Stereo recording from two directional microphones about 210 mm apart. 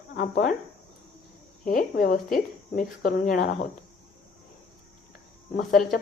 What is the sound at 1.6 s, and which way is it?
Speech, 40° left (ahead or behind).